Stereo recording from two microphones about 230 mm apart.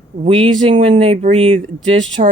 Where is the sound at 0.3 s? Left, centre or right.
Right.